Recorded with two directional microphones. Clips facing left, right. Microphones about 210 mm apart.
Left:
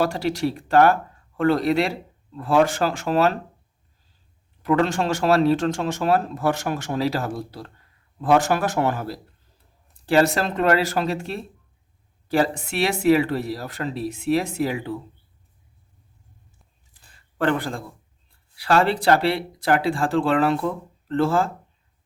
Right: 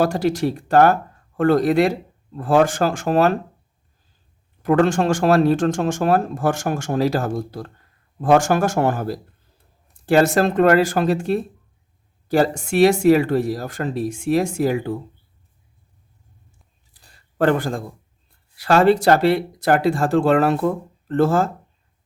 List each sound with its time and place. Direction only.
0.0 s speech: 45° right (ahead or behind)
4.6 s speech: 45° right (ahead or behind)
16.9 s a sound: 40° right (ahead or behind)
18.5 s speech: 45° right (ahead or behind)